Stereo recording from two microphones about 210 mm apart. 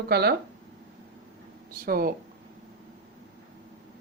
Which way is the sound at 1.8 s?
45° right (ahead or behind).